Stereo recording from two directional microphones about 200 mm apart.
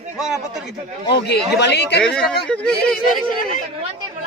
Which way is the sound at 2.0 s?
5° left (ahead or behind).